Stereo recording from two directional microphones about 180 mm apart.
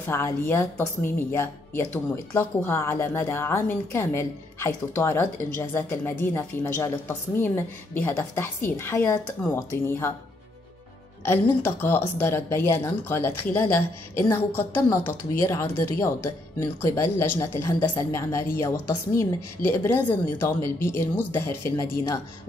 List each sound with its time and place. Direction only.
0.0 s a woman's voice: 15° left (ahead or behind)
11.2 s a woman's voice: 10° left (ahead or behind)